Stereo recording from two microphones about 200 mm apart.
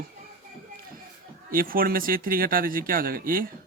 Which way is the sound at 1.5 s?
45° right (ahead or behind).